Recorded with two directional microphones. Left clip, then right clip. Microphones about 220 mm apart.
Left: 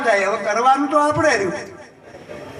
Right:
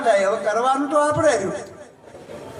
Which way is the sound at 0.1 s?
60° right (ahead or behind).